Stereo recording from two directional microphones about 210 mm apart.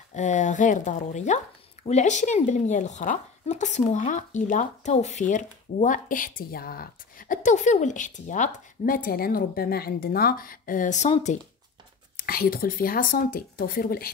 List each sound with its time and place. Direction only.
0.1 s speech: 35° left (ahead or behind)
12.2 s speech: 45° left (ahead or behind)